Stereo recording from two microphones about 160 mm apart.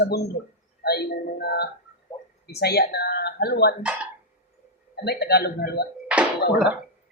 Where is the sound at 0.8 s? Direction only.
85° left.